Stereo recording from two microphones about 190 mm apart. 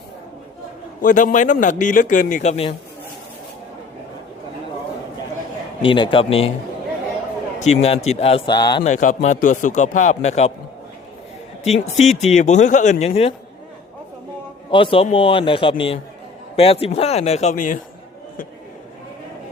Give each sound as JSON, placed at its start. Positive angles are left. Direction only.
{"t": 1.0, "sound": "a man's voice", "side_deg": 45}
{"t": 5.8, "sound": "a man's voice", "side_deg": 25}
{"t": 7.6, "sound": "speech", "side_deg": 35}
{"t": 8.8, "sound": "speech", "side_deg": 40}
{"t": 11.6, "sound": "speech", "side_deg": 35}
{"t": 14.7, "sound": "a man's voice", "side_deg": 30}